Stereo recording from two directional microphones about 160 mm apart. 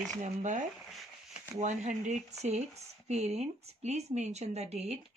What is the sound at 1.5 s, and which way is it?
Speech, 50° right (ahead or behind).